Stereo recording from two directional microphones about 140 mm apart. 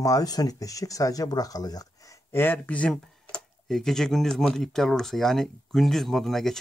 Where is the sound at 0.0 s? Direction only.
25° left (ahead or behind).